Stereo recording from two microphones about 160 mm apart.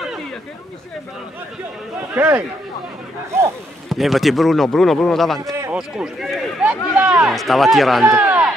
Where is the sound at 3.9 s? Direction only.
Centre (ahead or behind).